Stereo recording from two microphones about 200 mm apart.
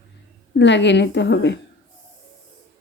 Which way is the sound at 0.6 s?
60° left (ahead or behind).